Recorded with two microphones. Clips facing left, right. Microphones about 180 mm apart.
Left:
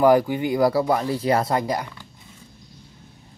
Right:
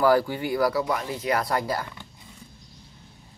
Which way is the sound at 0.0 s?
15° left (ahead or behind).